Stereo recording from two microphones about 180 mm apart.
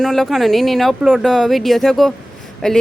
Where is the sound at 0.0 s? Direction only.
Centre (ahead or behind).